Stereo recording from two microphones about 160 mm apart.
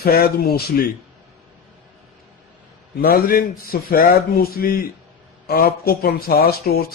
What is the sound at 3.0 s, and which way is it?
A man's voice, 70° left (ahead or behind).